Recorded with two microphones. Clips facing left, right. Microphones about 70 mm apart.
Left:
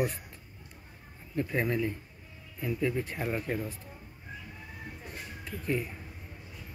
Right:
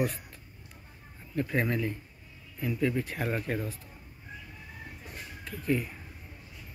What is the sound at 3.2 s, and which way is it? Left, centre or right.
Speech, centre.